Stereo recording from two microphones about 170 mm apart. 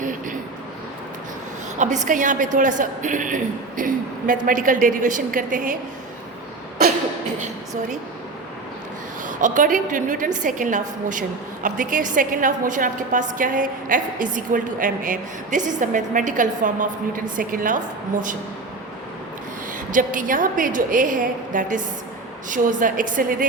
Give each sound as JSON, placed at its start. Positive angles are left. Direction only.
{"t": 1.8, "sound": "a woman's voice", "side_deg": -45}
{"t": 9.2, "sound": "a woman's voice", "side_deg": -50}
{"t": 19.9, "sound": "a woman's voice", "side_deg": -50}